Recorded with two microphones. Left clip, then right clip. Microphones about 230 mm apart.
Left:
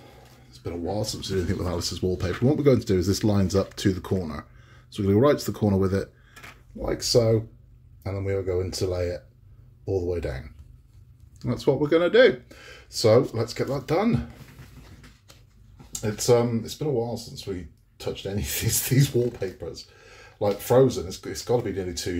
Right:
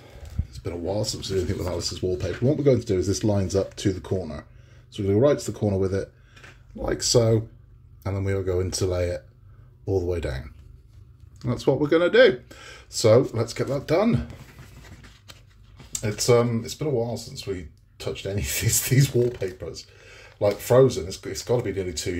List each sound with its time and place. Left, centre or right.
0.5 s speech: centre
6.8 s speech: centre
11.3 s speech: centre
15.9 s speech: centre